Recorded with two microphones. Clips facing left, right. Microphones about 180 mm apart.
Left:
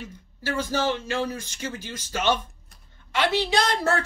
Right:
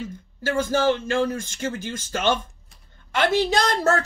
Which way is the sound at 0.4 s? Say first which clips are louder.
Right 4 dB; 50° right (ahead or behind).